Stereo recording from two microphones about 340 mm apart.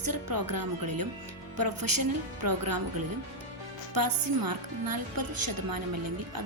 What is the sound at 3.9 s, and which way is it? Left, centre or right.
A woman's voice, right.